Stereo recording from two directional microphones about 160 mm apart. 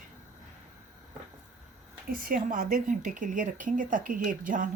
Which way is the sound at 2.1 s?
60° right (ahead or behind).